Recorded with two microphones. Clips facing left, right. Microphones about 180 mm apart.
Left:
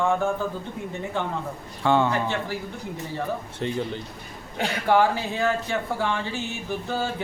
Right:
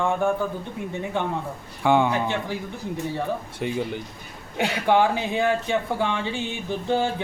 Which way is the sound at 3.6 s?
10° right (ahead or behind).